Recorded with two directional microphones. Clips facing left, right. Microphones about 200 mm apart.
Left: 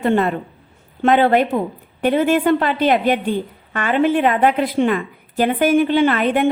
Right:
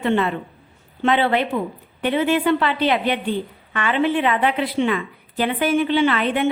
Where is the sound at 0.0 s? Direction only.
45° left (ahead or behind).